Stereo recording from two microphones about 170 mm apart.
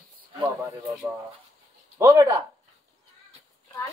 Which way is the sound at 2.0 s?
20° right (ahead or behind).